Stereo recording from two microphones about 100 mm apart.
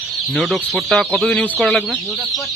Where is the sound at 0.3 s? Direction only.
Centre (ahead or behind).